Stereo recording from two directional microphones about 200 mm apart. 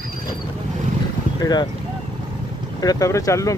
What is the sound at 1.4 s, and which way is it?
Speech, 20° left (ahead or behind).